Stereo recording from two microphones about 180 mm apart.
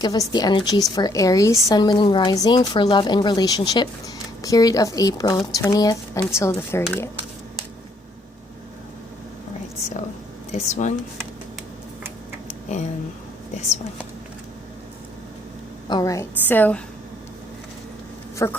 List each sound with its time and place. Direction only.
0.0 s a woman's voice: 20° left (ahead or behind)
10.5 s speech: 40° left (ahead or behind)
12.5 s a sound: 40° left (ahead or behind)
15.9 s speech: 20° left (ahead or behind)
18.4 s speech: 15° left (ahead or behind)